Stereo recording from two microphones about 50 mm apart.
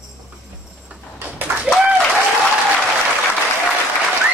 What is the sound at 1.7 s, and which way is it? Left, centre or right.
Applause, centre.